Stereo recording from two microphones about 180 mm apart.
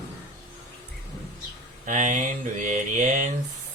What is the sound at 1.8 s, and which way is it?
Mantra, 45° right (ahead or behind).